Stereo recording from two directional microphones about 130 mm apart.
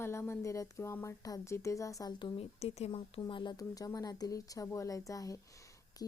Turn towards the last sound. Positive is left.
turn(degrees=30)  # may be behind; listen again after turning